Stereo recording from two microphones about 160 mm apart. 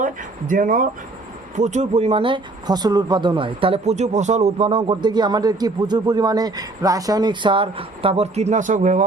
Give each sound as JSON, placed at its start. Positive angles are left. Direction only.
{"t": 0.0, "sound": "speech", "side_deg": -55}